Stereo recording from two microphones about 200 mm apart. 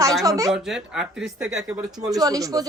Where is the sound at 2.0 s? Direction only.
20° right (ahead or behind).